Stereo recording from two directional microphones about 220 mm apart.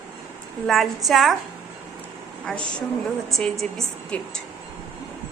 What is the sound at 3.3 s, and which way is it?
A woman's voice, centre (ahead or behind).